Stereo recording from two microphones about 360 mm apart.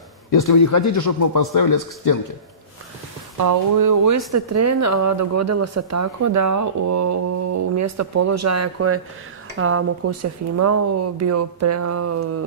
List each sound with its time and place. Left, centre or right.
0.3 s a man's voice: left
3.3 s speech: right